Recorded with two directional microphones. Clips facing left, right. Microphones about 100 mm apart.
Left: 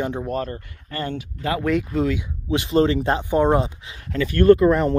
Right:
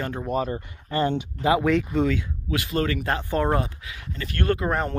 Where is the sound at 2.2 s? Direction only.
25° left (ahead or behind).